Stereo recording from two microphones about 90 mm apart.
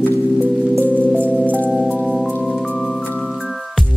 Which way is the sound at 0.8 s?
15° left (ahead or behind).